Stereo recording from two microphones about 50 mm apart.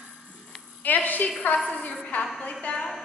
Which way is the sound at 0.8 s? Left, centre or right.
Left.